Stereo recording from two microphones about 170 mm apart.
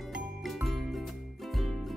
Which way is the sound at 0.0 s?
Centre (ahead or behind).